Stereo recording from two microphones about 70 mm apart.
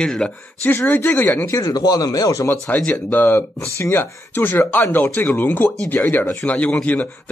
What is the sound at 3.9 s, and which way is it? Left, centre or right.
Speech, left.